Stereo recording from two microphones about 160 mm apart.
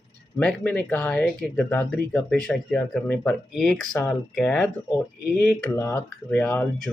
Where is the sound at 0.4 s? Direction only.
5° left (ahead or behind).